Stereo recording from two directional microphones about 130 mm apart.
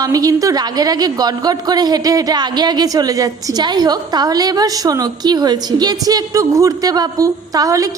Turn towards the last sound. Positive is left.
turn(degrees=-25)  # may be behind; listen again after turning